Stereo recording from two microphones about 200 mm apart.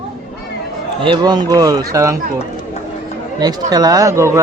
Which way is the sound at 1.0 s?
20° right (ahead or behind).